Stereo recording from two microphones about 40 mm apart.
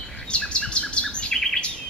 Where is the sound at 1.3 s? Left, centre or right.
Centre.